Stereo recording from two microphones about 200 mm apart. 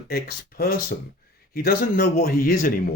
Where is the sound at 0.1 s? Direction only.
50° left (ahead or behind).